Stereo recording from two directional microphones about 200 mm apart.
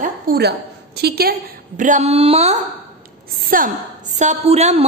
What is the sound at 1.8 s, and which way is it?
Speech, 35° right (ahead or behind).